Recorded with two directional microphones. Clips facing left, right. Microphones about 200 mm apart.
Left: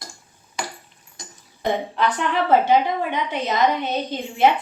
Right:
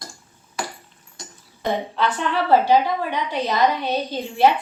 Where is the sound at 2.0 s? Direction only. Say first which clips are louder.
Left 1 dB; 15° left (ahead or behind).